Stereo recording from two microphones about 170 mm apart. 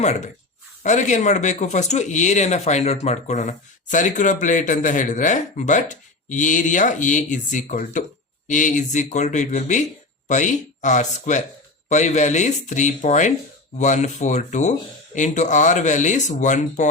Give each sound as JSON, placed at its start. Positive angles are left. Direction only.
{"t": 0.8, "sound": "a man's voice", "side_deg": 45}